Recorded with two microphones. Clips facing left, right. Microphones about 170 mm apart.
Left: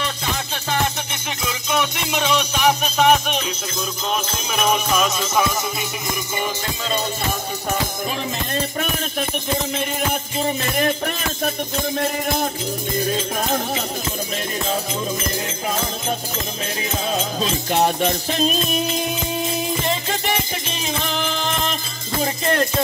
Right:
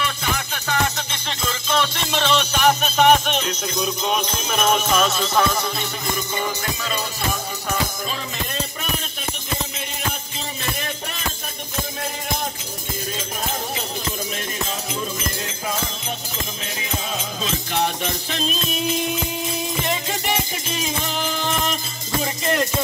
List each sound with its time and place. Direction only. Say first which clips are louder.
1.7 s music: even; 10° left (ahead or behind)
4.6 s jingle bell: even; 10° left (ahead or behind)
17.4 s music: left 3 dB; 45° left (ahead or behind)